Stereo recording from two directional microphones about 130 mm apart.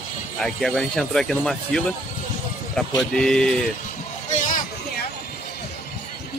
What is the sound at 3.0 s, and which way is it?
Speech, 5° left (ahead or behind).